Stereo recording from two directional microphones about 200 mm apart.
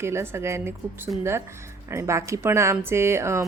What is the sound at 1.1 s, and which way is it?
Speech, centre (ahead or behind).